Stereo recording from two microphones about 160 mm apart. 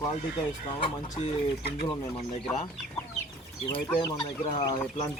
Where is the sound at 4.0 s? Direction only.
30° left (ahead or behind).